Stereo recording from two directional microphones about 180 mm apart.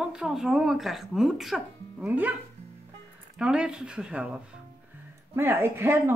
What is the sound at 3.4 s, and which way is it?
Speech, 5° right (ahead or behind).